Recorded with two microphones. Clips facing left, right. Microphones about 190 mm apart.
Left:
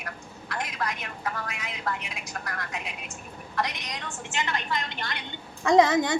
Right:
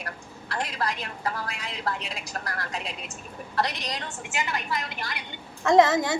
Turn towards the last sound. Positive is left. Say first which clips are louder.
# right 1 dB
turn(degrees=0)  # may be behind; listen again after turning